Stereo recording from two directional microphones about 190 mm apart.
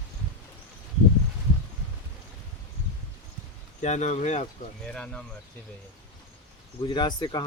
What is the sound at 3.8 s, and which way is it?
Speech, 40° left (ahead or behind).